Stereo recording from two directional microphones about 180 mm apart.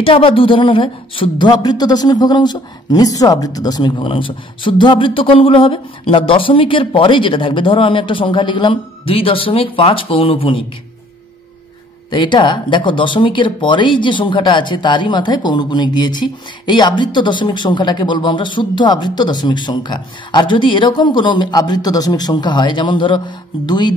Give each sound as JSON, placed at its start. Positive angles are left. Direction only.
{"t": 0.0, "sound": "speech", "side_deg": 30}
{"t": 12.1, "sound": "speech", "side_deg": 25}